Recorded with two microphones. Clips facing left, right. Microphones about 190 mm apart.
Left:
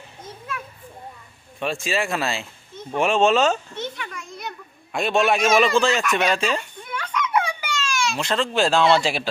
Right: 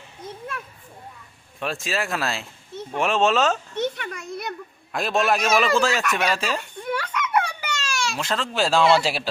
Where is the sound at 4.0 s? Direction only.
60° right (ahead or behind).